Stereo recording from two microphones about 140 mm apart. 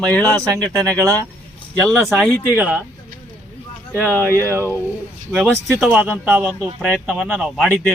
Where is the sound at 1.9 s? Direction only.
Centre (ahead or behind).